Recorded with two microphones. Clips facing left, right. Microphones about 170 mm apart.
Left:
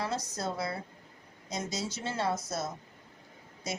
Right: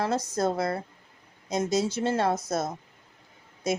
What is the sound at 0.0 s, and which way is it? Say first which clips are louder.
A woman's voice: right 8 dB; 50° right (ahead or behind).